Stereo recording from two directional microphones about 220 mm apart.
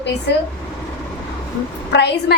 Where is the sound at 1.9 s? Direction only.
50° left (ahead or behind).